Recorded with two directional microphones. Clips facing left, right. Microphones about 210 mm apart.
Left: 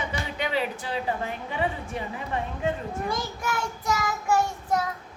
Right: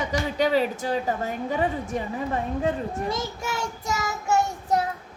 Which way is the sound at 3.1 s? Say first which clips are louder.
Right 1 dB; 25° right (ahead or behind).